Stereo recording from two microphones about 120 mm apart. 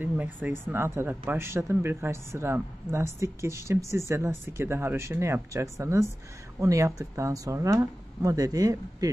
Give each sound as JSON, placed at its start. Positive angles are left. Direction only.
{"t": 0.0, "sound": "speech", "side_deg": -15}